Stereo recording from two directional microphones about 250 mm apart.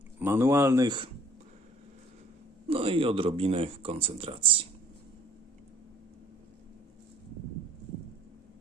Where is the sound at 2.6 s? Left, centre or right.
Right.